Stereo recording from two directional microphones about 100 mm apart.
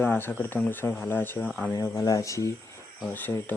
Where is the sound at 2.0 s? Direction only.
35° left (ahead or behind).